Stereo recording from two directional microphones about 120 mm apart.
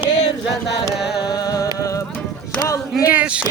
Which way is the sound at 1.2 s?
30° left (ahead or behind).